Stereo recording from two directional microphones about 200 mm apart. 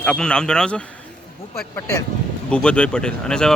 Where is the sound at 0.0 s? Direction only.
5° left (ahead or behind).